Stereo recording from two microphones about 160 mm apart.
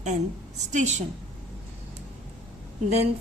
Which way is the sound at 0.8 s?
50° right (ahead or behind).